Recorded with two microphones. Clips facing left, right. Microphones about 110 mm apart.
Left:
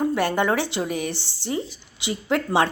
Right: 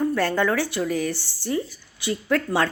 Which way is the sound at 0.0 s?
20° left (ahead or behind).